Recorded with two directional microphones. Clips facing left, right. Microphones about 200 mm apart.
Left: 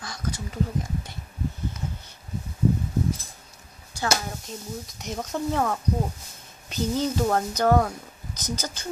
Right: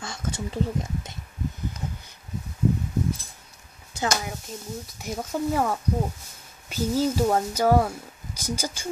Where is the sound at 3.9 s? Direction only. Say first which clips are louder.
Right 2 dB; 20° right (ahead or behind).